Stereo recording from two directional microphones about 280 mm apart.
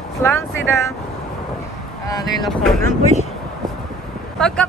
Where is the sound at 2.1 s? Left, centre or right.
Centre.